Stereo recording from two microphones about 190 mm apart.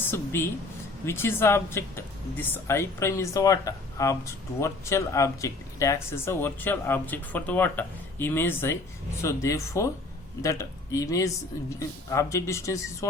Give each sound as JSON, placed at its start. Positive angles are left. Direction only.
{"t": 0.0, "sound": "a woman's voice", "side_deg": 10}